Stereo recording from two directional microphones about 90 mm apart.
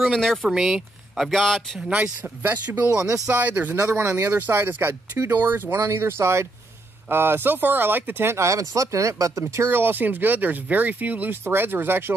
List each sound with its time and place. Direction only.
0.0 s speech: 5° left (ahead or behind)
1.9 s speech: 15° right (ahead or behind); by 9.4 s 35° right (ahead or behind)
9.4 s speech: 25° right (ahead or behind)